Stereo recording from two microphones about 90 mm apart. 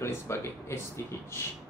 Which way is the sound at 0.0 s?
30° left (ahead or behind).